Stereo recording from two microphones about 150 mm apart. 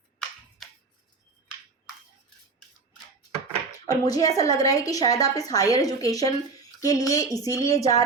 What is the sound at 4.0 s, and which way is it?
A woman's voice, 25° left (ahead or behind).